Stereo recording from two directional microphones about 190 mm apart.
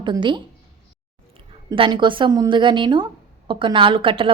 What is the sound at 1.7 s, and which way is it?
A woman's voice, 25° right (ahead or behind).